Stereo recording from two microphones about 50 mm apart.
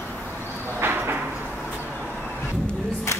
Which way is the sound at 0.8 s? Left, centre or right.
Right.